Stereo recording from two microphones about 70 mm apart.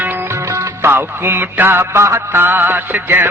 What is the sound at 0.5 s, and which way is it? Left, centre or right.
Music, right.